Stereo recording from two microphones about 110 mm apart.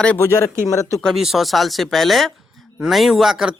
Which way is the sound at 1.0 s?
Centre (ahead or behind).